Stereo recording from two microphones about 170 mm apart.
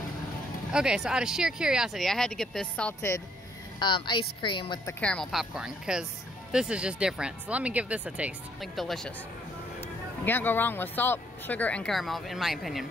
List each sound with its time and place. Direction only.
0.7 s speech: 5° right (ahead or behind)
3.8 s a woman's voice: 25° left (ahead or behind)
5.0 s speech: 5° left (ahead or behind)